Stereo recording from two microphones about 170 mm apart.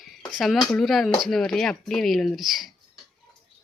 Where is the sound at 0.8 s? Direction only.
Centre (ahead or behind).